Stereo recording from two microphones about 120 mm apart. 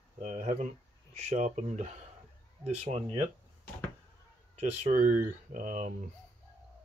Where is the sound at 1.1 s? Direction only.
80° right.